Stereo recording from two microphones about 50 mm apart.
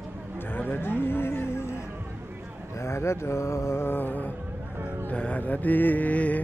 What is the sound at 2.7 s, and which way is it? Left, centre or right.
Mantra, left.